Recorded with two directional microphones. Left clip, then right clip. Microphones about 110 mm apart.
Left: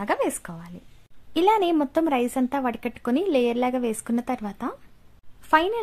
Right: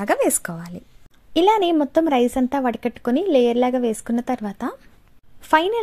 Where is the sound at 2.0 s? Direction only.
35° right (ahead or behind).